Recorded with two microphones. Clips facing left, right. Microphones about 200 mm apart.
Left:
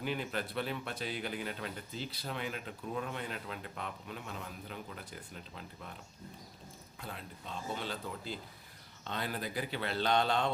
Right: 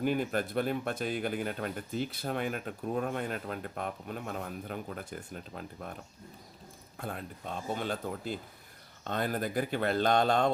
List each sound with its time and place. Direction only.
0.0 s speech: 50° right (ahead or behind)